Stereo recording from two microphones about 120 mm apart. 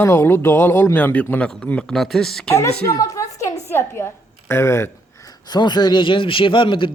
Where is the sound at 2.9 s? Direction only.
30° left (ahead or behind).